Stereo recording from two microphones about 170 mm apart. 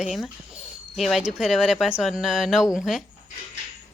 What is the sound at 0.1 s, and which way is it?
Speech, centre (ahead or behind).